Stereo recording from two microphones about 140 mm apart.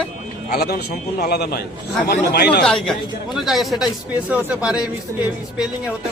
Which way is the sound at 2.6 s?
5° left (ahead or behind).